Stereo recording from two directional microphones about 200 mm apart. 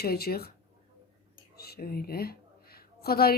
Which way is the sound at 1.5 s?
50° left (ahead or behind).